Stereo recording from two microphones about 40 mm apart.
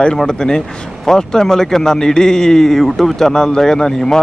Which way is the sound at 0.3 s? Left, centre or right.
Centre.